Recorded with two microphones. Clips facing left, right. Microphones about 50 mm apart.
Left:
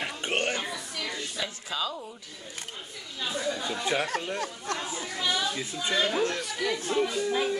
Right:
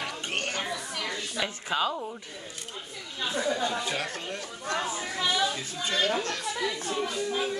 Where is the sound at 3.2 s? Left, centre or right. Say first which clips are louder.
Right 3 dB; right.